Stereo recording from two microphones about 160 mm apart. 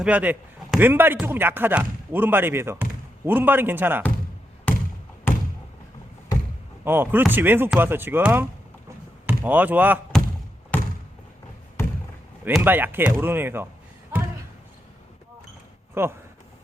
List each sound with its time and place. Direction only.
0.0 s speech: 10° right (ahead or behind)
4.7 s basketball bounce: 10° left (ahead or behind)
5.3 s thump: 15° left (ahead or behind)
6.8 s speech: 10° right (ahead or behind)
10.7 s a sound: 10° left (ahead or behind)
12.6 s speech: 10° right (ahead or behind)
16.0 s speech: 15° right (ahead or behind)